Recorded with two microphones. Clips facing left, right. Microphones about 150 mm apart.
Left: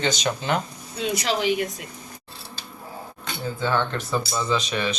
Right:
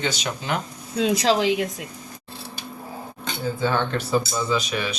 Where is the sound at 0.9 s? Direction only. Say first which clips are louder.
Right 5 dB; 90° right.